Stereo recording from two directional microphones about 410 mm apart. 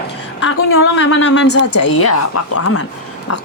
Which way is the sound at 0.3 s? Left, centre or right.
Left.